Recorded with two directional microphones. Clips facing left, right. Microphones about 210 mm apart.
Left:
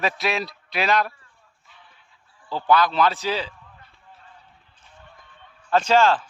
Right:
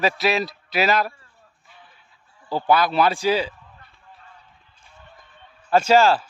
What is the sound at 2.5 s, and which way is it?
A man's voice, 10° right (ahead or behind).